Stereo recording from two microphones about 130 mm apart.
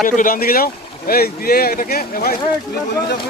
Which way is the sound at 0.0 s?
90° left.